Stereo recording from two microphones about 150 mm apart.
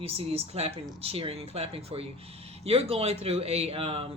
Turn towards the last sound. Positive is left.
turn(degrees=-40)  # may be behind; listen again after turning